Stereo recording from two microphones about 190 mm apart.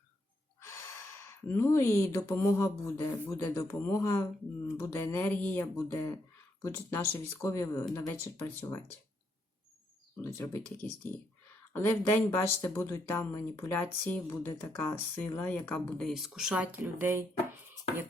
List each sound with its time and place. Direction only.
0.6 s gasp: 15° left (ahead or behind)
1.5 s speech: 15° left (ahead or behind)
10.2 s speech: 15° left (ahead or behind)
10.6 s speech: 20° right (ahead or behind)
11.7 s speech: 10° left (ahead or behind); by 17.2 s 10° right (ahead or behind)